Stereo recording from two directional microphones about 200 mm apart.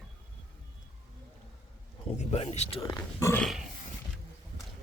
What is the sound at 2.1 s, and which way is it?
Speech, 35° left (ahead or behind).